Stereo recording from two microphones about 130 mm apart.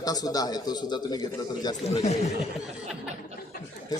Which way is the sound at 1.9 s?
55° left (ahead or behind).